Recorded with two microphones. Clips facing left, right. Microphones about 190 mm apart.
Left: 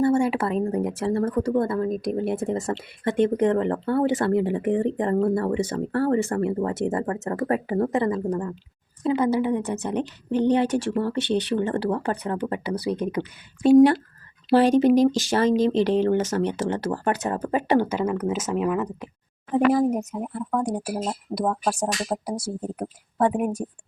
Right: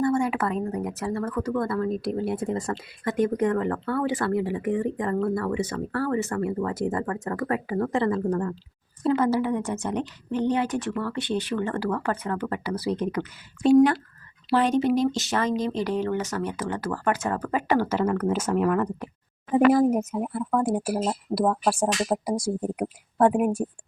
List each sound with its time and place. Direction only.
0.0 s speech: 25° left (ahead or behind)
14.5 s speech: 35° left (ahead or behind); by 18.5 s 10° left (ahead or behind)
19.5 s speech: centre (ahead or behind)